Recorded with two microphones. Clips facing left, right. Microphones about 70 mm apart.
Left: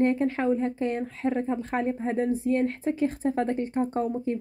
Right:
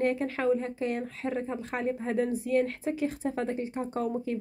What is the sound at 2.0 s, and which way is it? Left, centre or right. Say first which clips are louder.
Speech: left 2 dB; left.